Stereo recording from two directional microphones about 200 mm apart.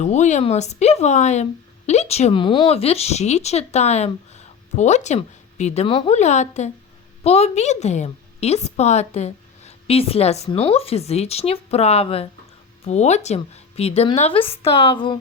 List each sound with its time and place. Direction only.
0.0 s a woman's voice: 35° left (ahead or behind)